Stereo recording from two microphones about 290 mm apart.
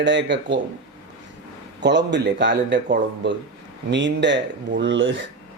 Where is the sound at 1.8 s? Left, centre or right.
Right.